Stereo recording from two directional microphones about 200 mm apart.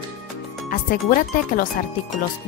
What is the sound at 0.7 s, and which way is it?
A woman's voice, 45° left (ahead or behind).